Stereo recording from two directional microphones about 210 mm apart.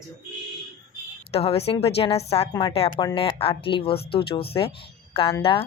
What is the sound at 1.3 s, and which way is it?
Speech, 30° left (ahead or behind).